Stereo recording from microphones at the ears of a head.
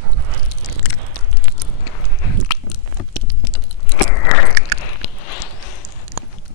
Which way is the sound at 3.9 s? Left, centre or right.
Left.